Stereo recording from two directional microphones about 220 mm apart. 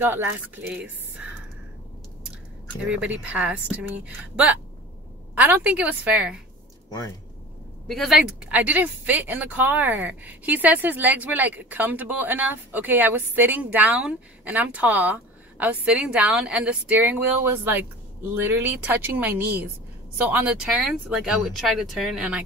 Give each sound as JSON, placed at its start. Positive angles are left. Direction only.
{"t": 0.0, "sound": "speech", "side_deg": -10}
{"t": 3.3, "sound": "speech", "side_deg": -5}
{"t": 6.9, "sound": "speech", "side_deg": 15}
{"t": 7.9, "sound": "speech", "side_deg": 0}